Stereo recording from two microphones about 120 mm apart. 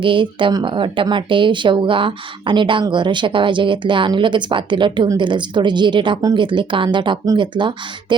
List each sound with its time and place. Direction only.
0.0 s speech: 45° right (ahead or behind)